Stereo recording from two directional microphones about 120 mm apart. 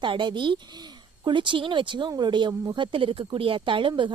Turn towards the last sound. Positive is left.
turn(degrees=-40)  # may be behind; listen again after turning